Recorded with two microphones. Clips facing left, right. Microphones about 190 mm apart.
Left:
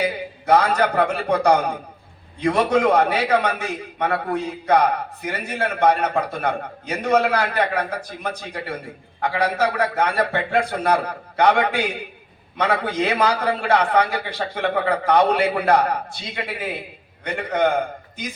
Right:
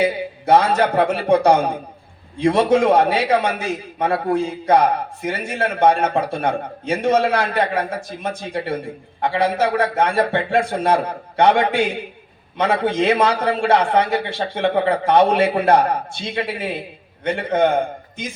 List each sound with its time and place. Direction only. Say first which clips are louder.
0.0 s a man's voice: right 4 dB; 25° right (ahead or behind)